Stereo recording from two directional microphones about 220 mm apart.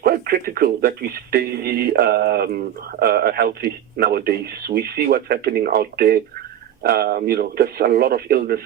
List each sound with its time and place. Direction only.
0.0 s speech: 45° right (ahead or behind)